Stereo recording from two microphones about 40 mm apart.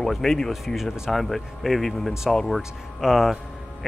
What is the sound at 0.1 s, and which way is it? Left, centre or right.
Speech, centre.